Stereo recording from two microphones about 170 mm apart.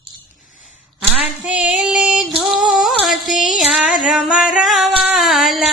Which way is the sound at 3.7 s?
Centre (ahead or behind).